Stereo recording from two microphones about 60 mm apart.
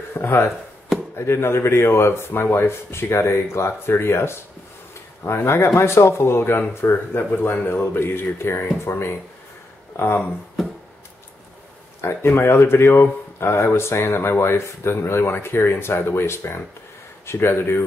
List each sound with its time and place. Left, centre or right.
0.1 s speech: left
12.0 s speech: left